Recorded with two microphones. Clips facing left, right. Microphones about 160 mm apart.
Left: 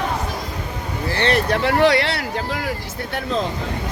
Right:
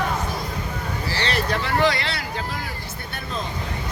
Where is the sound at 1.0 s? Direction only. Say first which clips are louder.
Left 6 dB; 55° left (ahead or behind).